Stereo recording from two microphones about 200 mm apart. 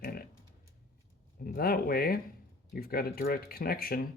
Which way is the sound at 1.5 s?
50° left (ahead or behind).